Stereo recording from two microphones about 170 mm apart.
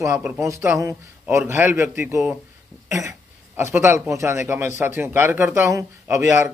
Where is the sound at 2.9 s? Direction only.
15° right (ahead or behind).